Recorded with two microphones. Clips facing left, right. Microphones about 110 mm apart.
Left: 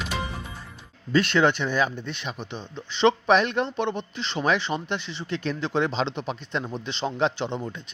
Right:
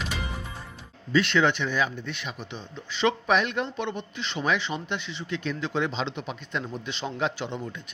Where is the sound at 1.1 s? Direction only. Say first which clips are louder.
Left 2 dB; 40° left (ahead or behind).